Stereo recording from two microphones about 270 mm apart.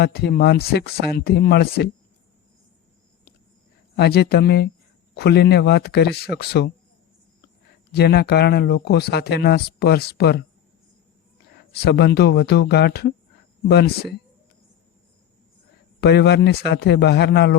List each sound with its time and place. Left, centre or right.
0.0 s speech: left
3.9 s speech: left
7.9 s speech: left
11.7 s speech: left
16.0 s speech: left